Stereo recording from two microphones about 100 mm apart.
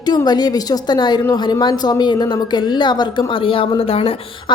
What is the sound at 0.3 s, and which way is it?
A woman's voice, 45° left (ahead or behind).